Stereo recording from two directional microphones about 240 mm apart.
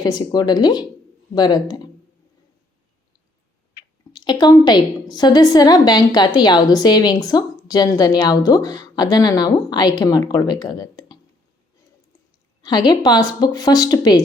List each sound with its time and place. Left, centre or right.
0.0 s a woman's voice: centre
4.1 s a woman's voice: centre
12.6 s a woman's voice: centre